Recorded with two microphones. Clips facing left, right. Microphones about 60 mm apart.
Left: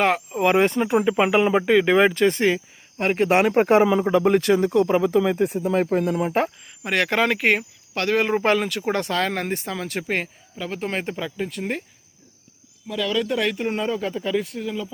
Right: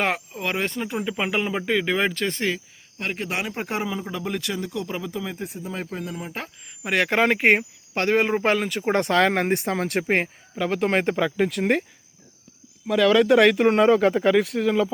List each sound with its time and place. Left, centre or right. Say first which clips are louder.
0.3 s speech: left 8 dB; centre
3.0 s speech: left 10 dB; left
5.1 s speech: left 11 dB; left
6.8 s speech: even; centre; by 8.2 s right
8.2 s speech: left 1 dB; centre
8.9 s speech: right 5 dB; right
10.6 s speech: right 5 dB; right
11.3 s speech: right 6 dB; right
12.9 s speech: right 7 dB; right